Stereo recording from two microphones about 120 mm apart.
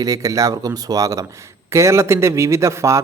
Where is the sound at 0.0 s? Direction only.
30° right (ahead or behind).